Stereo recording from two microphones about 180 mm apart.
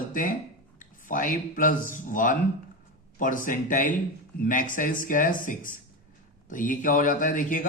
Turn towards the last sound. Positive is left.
turn(degrees=45)  # may be behind; listen again after turning